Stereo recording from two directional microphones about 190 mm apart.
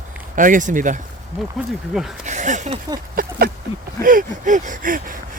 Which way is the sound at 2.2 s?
40° right (ahead or behind).